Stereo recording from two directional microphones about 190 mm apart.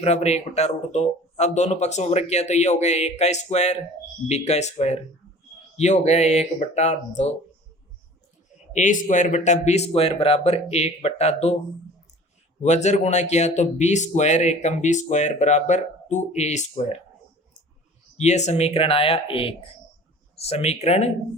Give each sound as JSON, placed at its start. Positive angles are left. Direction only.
{"t": 0.0, "sound": "a man's voice", "side_deg": 35}
{"t": 8.7, "sound": "a man's voice", "side_deg": 40}
{"t": 12.6, "sound": "a man's voice", "side_deg": 35}
{"t": 18.2, "sound": "a man's voice", "side_deg": 35}